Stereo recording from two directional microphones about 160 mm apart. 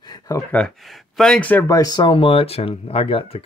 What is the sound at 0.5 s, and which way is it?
Speech, centre (ahead or behind).